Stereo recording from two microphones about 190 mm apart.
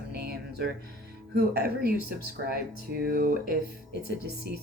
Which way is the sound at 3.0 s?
50° right (ahead or behind).